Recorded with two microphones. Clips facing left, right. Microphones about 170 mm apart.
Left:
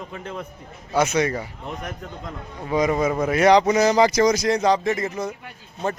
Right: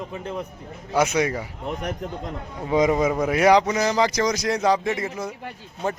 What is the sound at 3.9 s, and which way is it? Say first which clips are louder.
Speech: left 4 dB; 10° left (ahead or behind).